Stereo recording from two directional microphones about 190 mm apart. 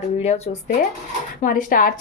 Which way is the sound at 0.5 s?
30° left (ahead or behind).